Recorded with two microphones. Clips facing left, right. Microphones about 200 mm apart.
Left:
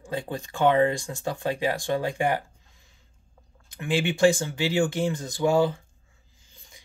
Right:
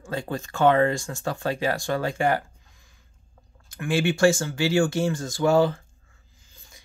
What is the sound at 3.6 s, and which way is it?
A man's voice, 20° left (ahead or behind).